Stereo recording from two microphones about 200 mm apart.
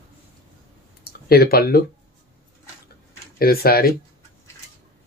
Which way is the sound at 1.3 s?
50° left (ahead or behind).